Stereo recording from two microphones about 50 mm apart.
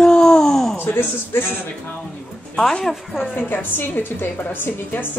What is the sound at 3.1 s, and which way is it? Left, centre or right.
A woman's voice, left.